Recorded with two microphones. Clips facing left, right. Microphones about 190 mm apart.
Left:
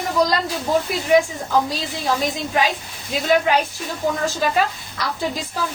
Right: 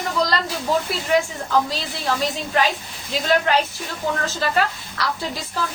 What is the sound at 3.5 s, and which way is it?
A woman's voice, 10° left (ahead or behind).